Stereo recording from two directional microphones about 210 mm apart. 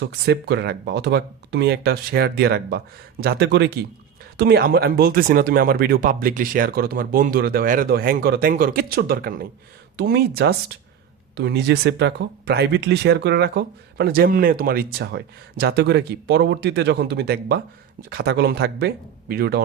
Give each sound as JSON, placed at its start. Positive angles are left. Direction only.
{"t": 0.0, "sound": "speech", "side_deg": -50}